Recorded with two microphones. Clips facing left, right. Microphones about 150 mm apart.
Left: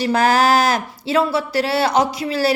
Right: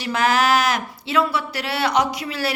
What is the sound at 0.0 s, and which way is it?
Speech, 35° left (ahead or behind).